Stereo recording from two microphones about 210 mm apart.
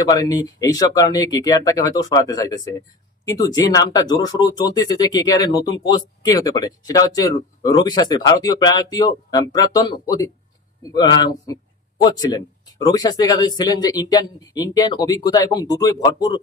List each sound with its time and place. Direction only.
0.0 s speech: 15° left (ahead or behind)